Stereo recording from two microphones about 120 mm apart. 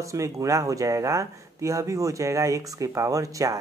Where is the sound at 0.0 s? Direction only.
25° right (ahead or behind).